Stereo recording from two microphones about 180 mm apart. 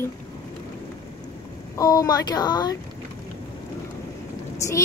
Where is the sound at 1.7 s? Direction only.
20° left (ahead or behind).